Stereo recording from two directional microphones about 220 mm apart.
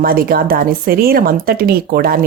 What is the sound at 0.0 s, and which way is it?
Speech, 40° right (ahead or behind).